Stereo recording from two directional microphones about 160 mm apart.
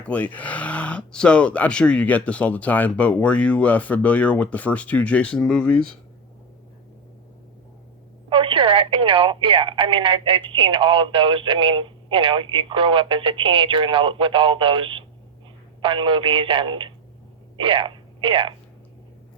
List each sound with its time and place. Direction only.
0.0 s speech: 10° left (ahead or behind)
8.3 s speech: 35° right (ahead or behind)